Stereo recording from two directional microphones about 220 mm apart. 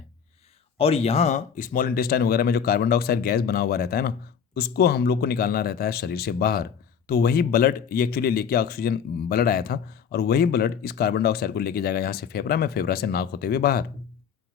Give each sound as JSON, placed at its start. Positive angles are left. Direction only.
{"t": 0.8, "sound": "speech", "side_deg": 25}